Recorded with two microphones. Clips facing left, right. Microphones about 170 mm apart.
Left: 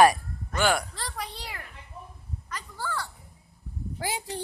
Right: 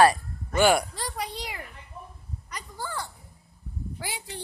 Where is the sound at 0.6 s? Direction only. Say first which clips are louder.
Right 4 dB; 15° right (ahead or behind).